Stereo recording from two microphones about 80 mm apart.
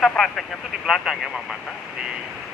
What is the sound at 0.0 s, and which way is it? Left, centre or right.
Speech, centre.